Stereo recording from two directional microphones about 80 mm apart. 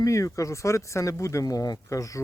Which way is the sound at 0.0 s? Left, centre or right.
Left.